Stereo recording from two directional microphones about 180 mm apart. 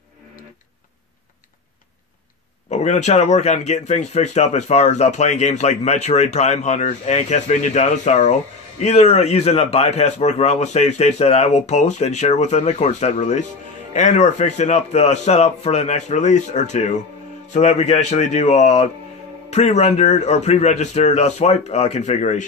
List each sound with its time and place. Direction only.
2.7 s speech: 40° left (ahead or behind)